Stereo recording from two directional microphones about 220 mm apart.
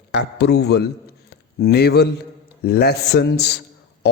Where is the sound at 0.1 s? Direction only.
50° left (ahead or behind).